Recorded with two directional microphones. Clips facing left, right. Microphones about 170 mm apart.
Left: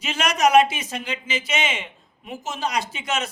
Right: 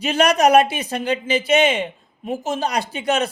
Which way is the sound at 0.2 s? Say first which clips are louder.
Right 3 dB; 60° right (ahead or behind).